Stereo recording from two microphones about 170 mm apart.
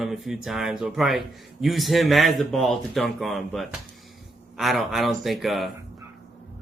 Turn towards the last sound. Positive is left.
turn(degrees=0)  # may be behind; listen again after turning